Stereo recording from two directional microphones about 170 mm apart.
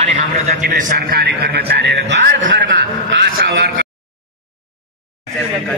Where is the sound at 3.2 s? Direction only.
70° right (ahead or behind).